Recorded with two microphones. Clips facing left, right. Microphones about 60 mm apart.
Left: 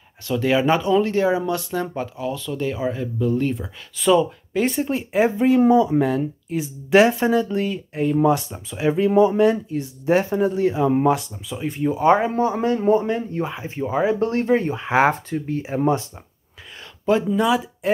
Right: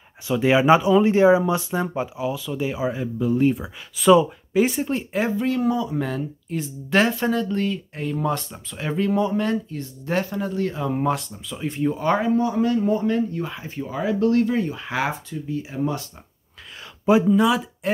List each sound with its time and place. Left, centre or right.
0.3 s speech: centre
5.1 s speech: centre
6.0 s speech: centre
12.0 s speech: left
12.3 s a man's voice: left
15.0 s speech: left
15.6 s a man's voice: left
17.3 s speech: centre